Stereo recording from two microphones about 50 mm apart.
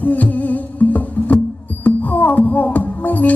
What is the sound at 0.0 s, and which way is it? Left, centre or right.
Music, left.